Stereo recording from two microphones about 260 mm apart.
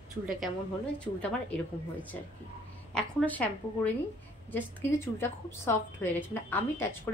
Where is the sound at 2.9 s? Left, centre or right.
Centre.